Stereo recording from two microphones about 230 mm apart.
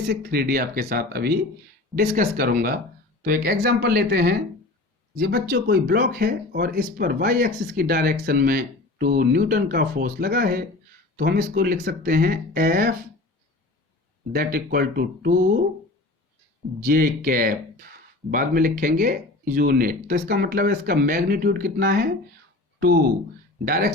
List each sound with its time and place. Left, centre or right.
0.1 s speech: right
14.3 s speech: right
16.8 s speech: right